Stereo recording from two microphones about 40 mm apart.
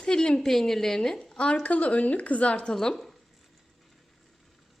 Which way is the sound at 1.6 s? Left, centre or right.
Left.